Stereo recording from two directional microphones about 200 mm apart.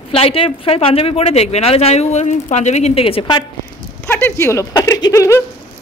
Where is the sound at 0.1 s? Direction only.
30° left (ahead or behind).